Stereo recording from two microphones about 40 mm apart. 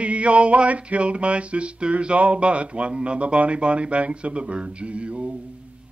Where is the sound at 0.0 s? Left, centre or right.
Right.